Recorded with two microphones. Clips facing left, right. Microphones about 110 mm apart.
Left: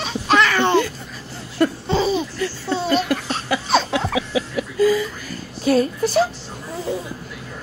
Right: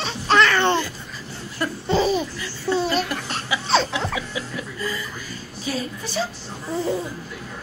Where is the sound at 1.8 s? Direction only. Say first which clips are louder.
Even; 20° left (ahead or behind).